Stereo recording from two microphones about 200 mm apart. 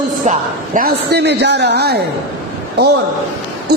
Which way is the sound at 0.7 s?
50° right (ahead or behind).